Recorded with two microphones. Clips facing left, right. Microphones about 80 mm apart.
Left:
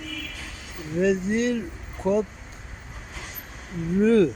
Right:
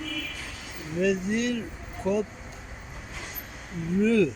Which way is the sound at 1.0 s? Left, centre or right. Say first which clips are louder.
Left 3 dB; left.